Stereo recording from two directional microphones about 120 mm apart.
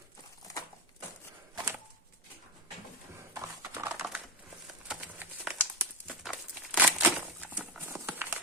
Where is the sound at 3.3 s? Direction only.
25° right (ahead or behind).